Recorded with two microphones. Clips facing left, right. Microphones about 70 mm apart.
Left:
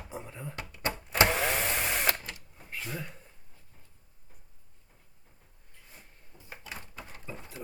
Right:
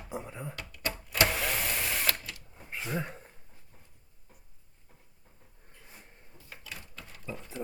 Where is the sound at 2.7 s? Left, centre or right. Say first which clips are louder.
Right 4 dB; right.